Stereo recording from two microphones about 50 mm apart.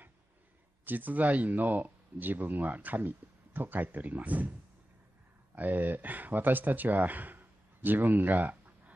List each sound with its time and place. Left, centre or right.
0.8 s speech: right
5.6 s speech: right